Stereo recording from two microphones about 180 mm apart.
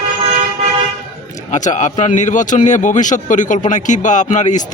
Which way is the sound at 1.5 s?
40° left (ahead or behind).